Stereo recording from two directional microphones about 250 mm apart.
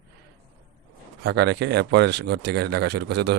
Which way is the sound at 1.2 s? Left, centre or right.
Right.